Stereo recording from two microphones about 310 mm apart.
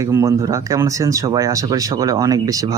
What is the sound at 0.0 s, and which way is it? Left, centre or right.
Speech, centre.